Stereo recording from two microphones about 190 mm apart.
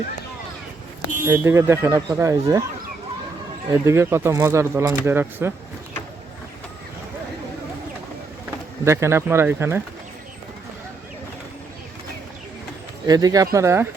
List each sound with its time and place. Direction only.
1.2 s speech: 15° right (ahead or behind)
3.7 s speech: 15° right (ahead or behind)
8.8 s speech: 15° right (ahead or behind)
13.1 s speech: 20° right (ahead or behind)